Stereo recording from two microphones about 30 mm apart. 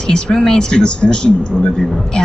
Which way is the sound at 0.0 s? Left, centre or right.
Left.